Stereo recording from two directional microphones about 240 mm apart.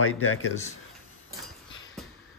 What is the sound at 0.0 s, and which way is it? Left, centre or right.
Speech, left.